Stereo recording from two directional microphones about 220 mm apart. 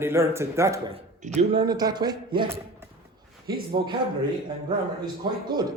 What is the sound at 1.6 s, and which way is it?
Speech, 20° right (ahead or behind).